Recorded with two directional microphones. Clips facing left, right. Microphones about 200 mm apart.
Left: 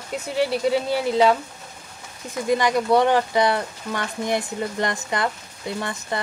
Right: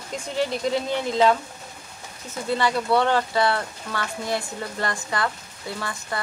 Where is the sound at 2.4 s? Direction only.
15° left (ahead or behind).